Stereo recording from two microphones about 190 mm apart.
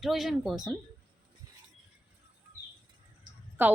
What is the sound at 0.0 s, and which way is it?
Speech, centre (ahead or behind).